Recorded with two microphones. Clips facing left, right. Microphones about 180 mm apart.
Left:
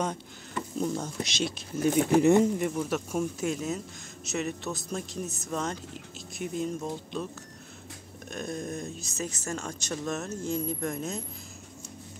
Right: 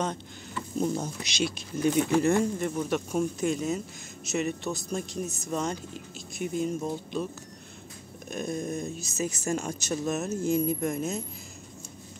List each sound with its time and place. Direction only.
0.8 s speech: 20° right (ahead or behind)
1.2 s speech: centre (ahead or behind)
2.0 s speech: 20° left (ahead or behind)
2.7 s speech: centre (ahead or behind)
8.3 s speech: centre (ahead or behind)